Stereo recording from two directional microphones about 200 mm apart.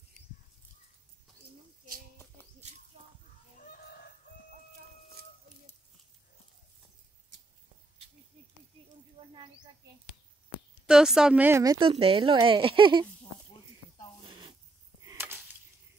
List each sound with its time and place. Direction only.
3.6 s chicken: 50° left (ahead or behind)
10.9 s a woman's voice: 5° right (ahead or behind); by 13.0 s 25° right (ahead or behind)
14.2 s a sound: 25° right (ahead or behind)
15.0 s chop: 10° right (ahead or behind)